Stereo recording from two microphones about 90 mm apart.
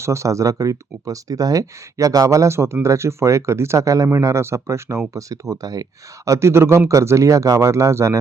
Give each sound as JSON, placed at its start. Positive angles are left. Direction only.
{"t": 0.0, "sound": "speech", "side_deg": -35}